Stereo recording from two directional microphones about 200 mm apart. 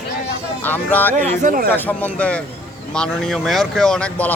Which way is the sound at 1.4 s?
40° right (ahead or behind).